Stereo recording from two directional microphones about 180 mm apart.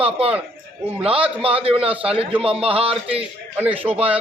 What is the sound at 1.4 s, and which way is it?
A man's voice, 30° right (ahead or behind).